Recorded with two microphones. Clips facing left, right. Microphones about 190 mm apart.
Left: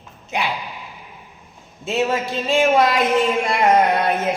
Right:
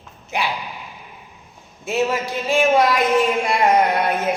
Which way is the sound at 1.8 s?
25° left (ahead or behind).